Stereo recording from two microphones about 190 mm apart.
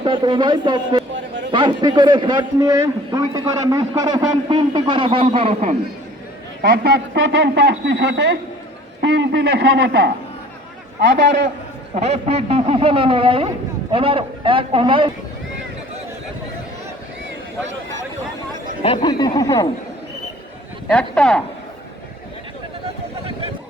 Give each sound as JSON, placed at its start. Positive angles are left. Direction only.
{"t": 0.0, "sound": "a man's voice", "side_deg": -25}
{"t": 6.6, "sound": "a man's voice", "side_deg": -55}
{"t": 11.9, "sound": "a man's voice", "side_deg": -35}
{"t": 18.8, "sound": "speech", "side_deg": 25}
{"t": 20.8, "sound": "speech", "side_deg": 5}